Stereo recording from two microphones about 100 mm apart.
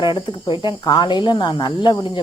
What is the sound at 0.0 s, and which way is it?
Speech, 55° left (ahead or behind).